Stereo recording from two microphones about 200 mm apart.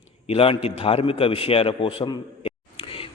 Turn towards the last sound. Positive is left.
turn(degrees=30)  # may be behind; listen again after turning